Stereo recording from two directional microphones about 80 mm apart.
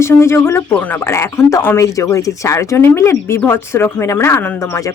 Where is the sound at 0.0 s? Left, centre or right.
Left.